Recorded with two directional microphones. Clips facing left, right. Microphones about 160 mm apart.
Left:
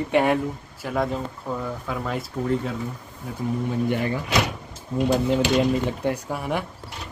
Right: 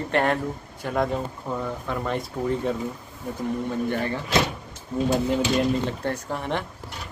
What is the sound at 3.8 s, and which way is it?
Speech, 15° left (ahead or behind).